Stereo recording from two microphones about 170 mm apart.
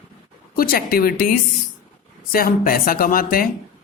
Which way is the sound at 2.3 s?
60° left (ahead or behind).